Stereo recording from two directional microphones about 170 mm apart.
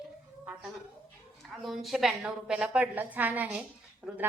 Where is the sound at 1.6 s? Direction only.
Centre (ahead or behind).